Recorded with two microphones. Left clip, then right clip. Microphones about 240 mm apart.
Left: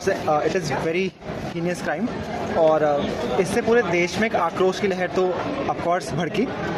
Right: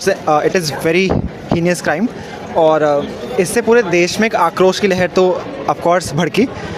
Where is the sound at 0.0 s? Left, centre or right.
Right.